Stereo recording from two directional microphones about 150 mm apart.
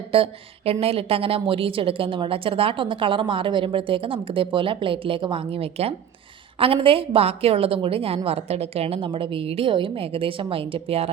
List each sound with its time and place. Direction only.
0.1 s a woman's voice: 40° right (ahead or behind)